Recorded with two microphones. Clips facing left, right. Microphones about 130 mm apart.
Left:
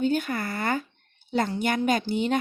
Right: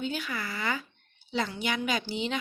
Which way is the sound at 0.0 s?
50° left (ahead or behind).